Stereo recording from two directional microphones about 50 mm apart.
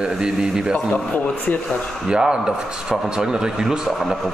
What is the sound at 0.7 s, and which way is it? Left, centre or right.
Speech, left.